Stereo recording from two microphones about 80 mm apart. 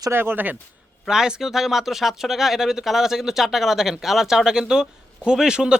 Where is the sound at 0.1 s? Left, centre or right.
Right.